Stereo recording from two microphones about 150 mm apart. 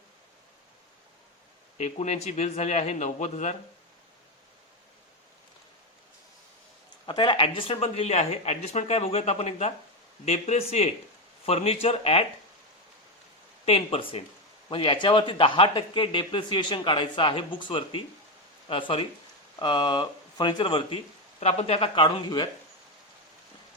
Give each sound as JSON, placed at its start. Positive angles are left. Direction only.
{"t": 1.8, "sound": "speech", "side_deg": 50}
{"t": 7.0, "sound": "speech", "side_deg": 30}
{"t": 13.7, "sound": "speech", "side_deg": 40}